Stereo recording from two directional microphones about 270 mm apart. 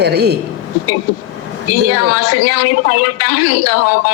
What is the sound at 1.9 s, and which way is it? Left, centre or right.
A woman's voice, left.